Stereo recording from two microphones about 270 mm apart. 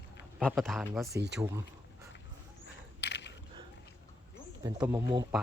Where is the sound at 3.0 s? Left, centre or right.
Left.